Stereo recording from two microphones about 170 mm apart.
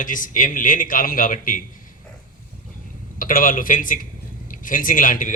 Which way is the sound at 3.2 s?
55° left (ahead or behind).